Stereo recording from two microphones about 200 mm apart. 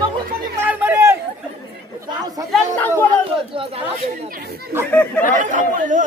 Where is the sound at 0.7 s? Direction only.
10° right (ahead or behind).